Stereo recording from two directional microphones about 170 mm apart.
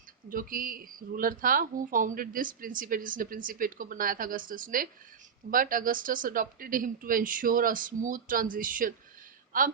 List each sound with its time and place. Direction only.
0.3 s speech: 55° right (ahead or behind)